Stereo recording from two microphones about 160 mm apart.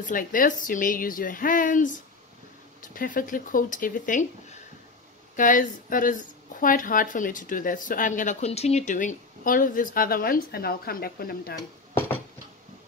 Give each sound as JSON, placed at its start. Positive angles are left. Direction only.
{"t": 0.0, "sound": "speech", "side_deg": 60}